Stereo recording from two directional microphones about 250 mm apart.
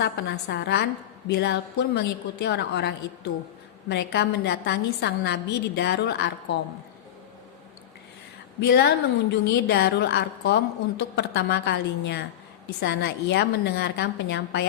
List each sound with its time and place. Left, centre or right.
0.0 s a woman's voice: left
8.6 s a woman's voice: left